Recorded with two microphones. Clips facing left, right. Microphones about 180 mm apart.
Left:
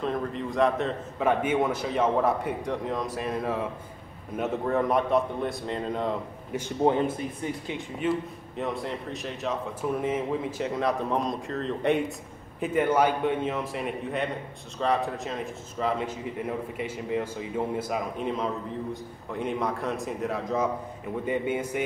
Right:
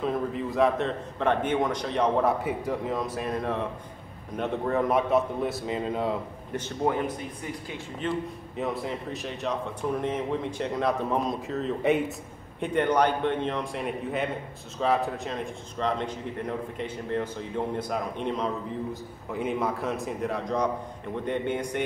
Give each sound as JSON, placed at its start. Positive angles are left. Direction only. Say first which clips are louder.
{"t": 0.0, "sound": "a man's voice", "louder": "right 1 dB", "side_deg": -5}
{"t": 6.8, "sound": "speech", "louder": "left 4 dB", "side_deg": 25}
{"t": 8.0, "sound": "a man's voice", "louder": "left 2 dB", "side_deg": 0}